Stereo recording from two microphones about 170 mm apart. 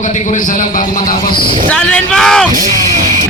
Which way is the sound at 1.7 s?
5° left (ahead or behind).